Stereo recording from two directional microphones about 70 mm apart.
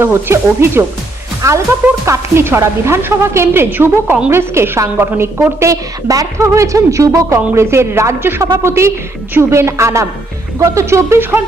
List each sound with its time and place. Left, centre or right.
0.0 s a woman's voice: right
1.4 s a woman's voice: right
2.0 s a woman's voice: right
5.5 s a woman's voice: right
11.2 s a woman's voice: right